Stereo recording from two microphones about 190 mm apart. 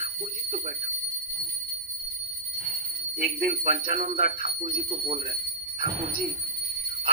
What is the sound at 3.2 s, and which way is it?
Speech, 45° right (ahead or behind).